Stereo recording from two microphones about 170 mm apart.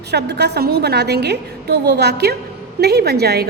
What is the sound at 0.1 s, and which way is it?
A woman's voice, 80° right.